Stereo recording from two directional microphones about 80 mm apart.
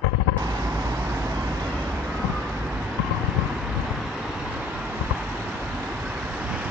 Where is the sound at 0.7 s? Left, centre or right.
Right.